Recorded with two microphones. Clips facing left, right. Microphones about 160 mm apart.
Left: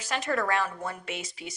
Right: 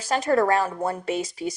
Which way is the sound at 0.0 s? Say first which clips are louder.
Right 8 dB; 35° right (ahead or behind).